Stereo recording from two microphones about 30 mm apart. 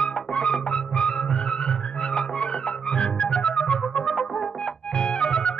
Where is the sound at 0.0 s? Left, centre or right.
Left.